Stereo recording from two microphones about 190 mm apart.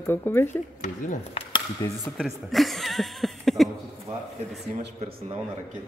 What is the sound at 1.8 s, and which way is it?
Speech, 20° left (ahead or behind).